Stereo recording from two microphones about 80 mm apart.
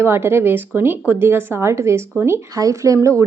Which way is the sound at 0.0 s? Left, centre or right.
Right.